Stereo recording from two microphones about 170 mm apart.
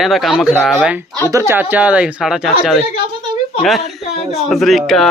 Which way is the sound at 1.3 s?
15° right (ahead or behind).